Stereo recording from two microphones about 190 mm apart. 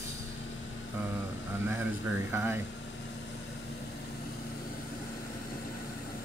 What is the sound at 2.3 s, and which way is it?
Speech, 10° right (ahead or behind).